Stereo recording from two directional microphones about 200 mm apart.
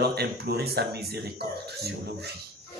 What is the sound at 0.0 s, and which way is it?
A man's voice, 55° right (ahead or behind).